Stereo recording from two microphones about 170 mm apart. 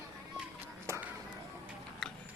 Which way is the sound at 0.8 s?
15° right (ahead or behind).